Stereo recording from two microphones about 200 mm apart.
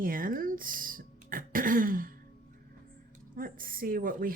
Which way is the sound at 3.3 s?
45° right (ahead or behind).